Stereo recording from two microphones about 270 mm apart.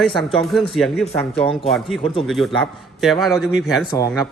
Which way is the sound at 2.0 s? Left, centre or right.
Left.